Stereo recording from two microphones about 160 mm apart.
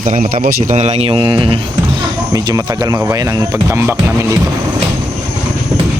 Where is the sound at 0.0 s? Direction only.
55° right (ahead or behind); by 4.4 s 15° right (ahead or behind).